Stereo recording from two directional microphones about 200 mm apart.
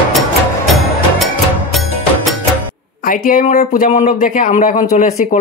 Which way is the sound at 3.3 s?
40° left (ahead or behind).